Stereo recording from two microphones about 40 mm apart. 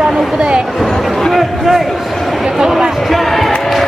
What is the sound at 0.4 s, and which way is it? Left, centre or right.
Speech, right.